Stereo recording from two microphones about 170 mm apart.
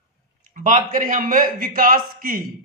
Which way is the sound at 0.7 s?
50° right (ahead or behind).